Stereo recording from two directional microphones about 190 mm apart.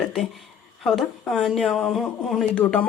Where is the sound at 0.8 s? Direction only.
Centre (ahead or behind).